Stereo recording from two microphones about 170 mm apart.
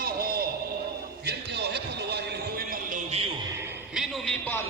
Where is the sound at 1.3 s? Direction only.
75° right (ahead or behind).